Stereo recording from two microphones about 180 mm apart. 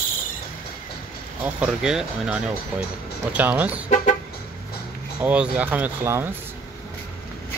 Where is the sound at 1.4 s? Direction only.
5° right (ahead or behind).